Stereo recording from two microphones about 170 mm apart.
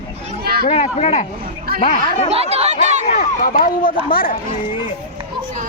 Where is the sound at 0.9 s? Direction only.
40° left (ahead or behind).